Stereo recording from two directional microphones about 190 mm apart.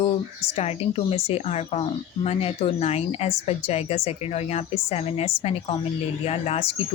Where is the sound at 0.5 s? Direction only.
35° left (ahead or behind).